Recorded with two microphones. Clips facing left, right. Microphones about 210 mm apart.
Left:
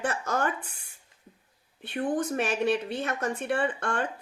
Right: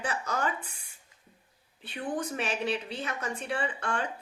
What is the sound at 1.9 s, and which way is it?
Speech, 45° left (ahead or behind).